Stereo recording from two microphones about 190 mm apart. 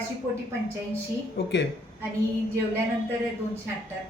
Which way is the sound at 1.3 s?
65° left (ahead or behind).